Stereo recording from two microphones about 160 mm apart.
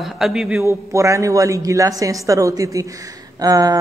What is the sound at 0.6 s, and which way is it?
A man's voice, 15° right (ahead or behind).